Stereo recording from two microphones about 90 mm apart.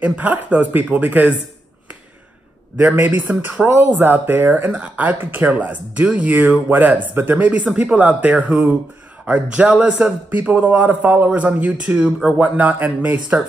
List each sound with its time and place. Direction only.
0.0 s speech: 15° right (ahead or behind)
2.8 s speech: 25° right (ahead or behind)